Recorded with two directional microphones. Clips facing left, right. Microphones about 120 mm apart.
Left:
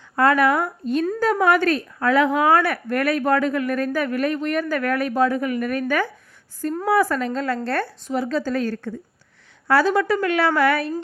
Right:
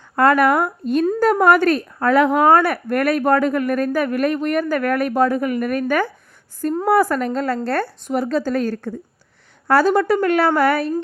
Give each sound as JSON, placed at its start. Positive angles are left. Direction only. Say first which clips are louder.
{"t": 0.2, "sound": "speech", "louder": "right 3 dB", "side_deg": -50}
{"t": 7.4, "sound": "a woman's voice", "louder": "right 3 dB", "side_deg": -40}